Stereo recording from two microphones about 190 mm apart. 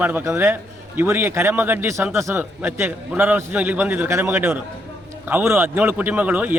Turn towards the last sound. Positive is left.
turn(degrees=-10)  # may be behind; listen again after turning